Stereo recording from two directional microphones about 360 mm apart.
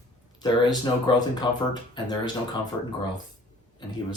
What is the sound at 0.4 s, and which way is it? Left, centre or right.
Speech, centre.